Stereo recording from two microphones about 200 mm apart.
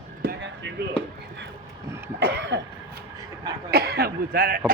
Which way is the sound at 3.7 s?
50° right (ahead or behind).